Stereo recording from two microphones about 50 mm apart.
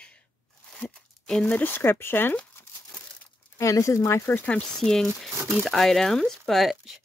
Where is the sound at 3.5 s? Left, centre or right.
Left.